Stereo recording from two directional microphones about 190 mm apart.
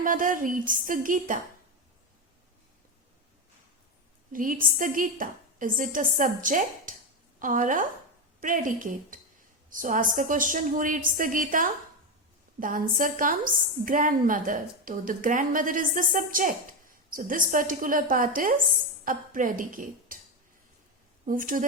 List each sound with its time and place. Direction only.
0.0 s a woman's voice: 45° right (ahead or behind)
4.3 s a woman's voice: 45° right (ahead or behind)
21.2 s a woman's voice: 45° right (ahead or behind)